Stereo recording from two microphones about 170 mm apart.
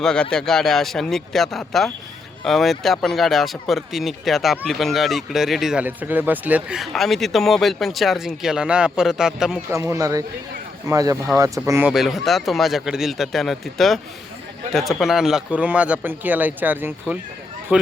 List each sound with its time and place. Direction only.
0.0 s speech: 5° left (ahead or behind)
9.7 s a man's voice: 20° right (ahead or behind)
11.9 s a man's voice: centre (ahead or behind)